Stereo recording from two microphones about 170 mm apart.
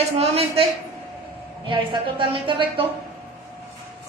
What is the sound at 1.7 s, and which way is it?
A woman's voice, 30° right (ahead or behind).